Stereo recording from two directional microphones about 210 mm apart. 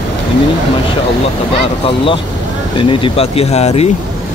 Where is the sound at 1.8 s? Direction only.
25° left (ahead or behind).